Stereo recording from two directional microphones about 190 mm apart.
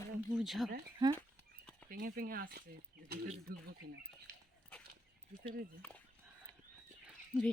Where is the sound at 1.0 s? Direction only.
20° right (ahead or behind).